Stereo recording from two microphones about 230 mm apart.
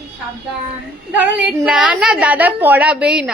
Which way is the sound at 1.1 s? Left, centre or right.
Centre.